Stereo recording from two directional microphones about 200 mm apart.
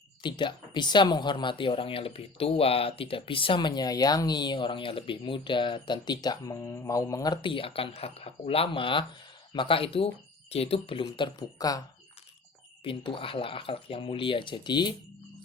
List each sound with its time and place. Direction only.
0.2 s speech: 25° left (ahead or behind)
12.8 s speech: 25° left (ahead or behind)